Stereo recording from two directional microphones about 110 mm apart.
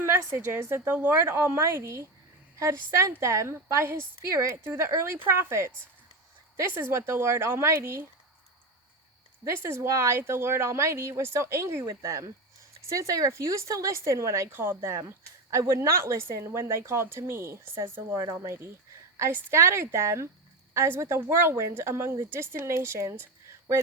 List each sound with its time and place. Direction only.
0.0 s speech: 25° right (ahead or behind)
9.4 s speech: 25° right (ahead or behind)